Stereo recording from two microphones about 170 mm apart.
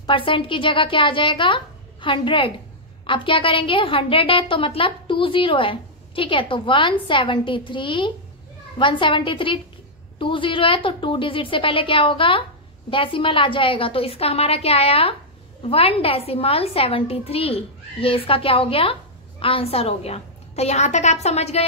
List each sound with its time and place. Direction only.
0.0 s a woman's voice: 30° left (ahead or behind)